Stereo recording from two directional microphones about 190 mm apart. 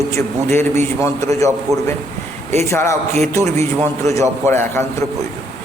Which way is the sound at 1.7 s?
15° right (ahead or behind).